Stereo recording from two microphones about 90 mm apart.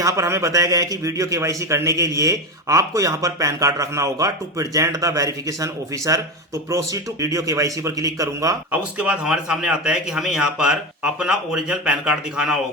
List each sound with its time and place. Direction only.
0.0 s a man's voice: 35° right (ahead or behind)
8.7 s a man's voice: 10° right (ahead or behind)